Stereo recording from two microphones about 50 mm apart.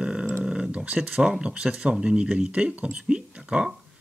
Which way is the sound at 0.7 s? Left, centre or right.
Right.